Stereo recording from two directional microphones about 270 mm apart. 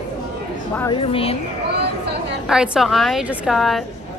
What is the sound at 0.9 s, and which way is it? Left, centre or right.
Speech, centre.